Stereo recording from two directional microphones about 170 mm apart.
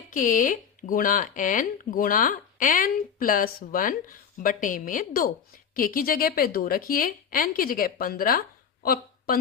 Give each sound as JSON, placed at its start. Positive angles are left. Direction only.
{"t": 0.1, "sound": "a woman's voice", "side_deg": 50}